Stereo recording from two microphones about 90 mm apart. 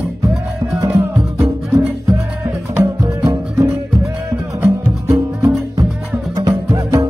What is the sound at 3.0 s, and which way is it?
Music, 40° right (ahead or behind).